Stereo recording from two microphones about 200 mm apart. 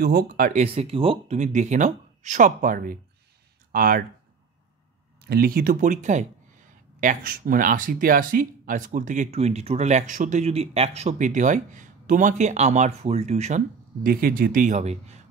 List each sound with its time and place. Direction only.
0.0 s speech: 50° right (ahead or behind)
5.2 s speech: 50° right (ahead or behind); by 13.6 s 35° right (ahead or behind)
14.0 s speech: 45° right (ahead or behind)